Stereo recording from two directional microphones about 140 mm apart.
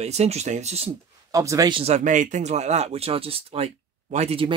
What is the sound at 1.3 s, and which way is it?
Speech, 25° right (ahead or behind).